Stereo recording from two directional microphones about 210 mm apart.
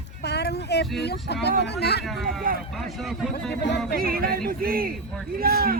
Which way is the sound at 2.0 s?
Centre (ahead or behind).